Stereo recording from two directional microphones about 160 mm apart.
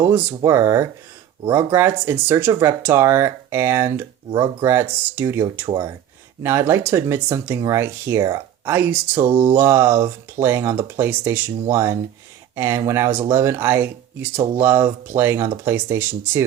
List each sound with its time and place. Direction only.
0.0 s speech: 15° right (ahead or behind)